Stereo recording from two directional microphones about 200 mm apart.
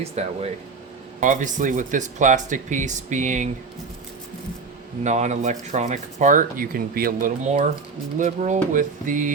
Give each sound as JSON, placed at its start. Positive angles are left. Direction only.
{"t": 0.2, "sound": "speech", "side_deg": -30}
{"t": 5.0, "sound": "speech", "side_deg": -35}